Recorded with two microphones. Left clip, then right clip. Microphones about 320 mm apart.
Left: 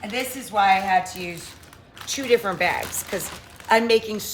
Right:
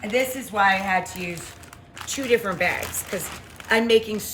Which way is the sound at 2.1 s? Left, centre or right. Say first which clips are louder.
Left 1 dB; centre.